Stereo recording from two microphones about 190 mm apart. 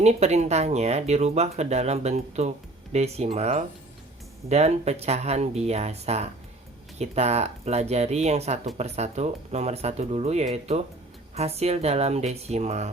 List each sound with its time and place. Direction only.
0.0 s speech: 35° right (ahead or behind)